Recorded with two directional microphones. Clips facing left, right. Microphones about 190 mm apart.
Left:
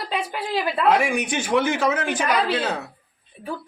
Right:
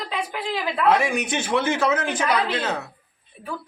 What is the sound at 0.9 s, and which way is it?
A man's voice, 10° left (ahead or behind).